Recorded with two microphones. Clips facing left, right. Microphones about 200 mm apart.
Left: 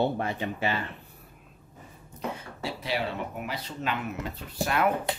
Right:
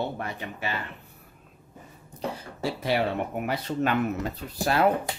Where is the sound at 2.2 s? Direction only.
35° right (ahead or behind).